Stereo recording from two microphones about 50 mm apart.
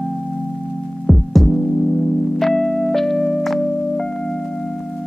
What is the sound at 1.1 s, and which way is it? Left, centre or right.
Music, centre.